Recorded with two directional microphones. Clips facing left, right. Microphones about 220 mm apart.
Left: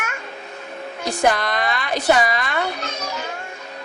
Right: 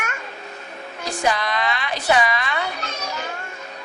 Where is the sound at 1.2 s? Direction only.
50° left (ahead or behind).